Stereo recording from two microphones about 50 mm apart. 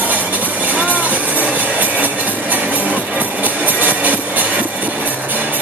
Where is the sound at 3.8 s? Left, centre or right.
Right.